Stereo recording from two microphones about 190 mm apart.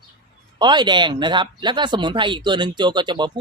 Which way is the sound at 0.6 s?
25° right (ahead or behind).